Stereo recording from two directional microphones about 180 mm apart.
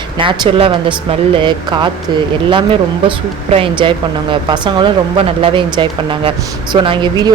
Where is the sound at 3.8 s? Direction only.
25° right (ahead or behind).